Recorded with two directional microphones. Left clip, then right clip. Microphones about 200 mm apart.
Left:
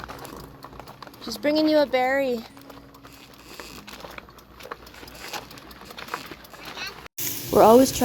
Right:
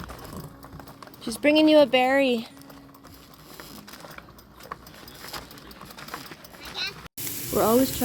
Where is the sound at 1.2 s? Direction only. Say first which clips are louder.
Right 3 dB; 40° right (ahead or behind).